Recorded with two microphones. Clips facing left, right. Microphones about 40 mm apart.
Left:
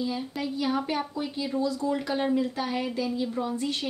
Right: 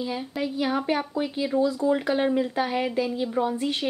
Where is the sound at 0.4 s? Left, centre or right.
Centre.